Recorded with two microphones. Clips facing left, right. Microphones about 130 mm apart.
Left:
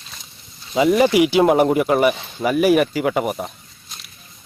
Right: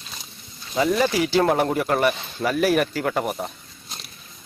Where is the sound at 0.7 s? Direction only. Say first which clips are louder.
Left 6 dB; 15° left (ahead or behind).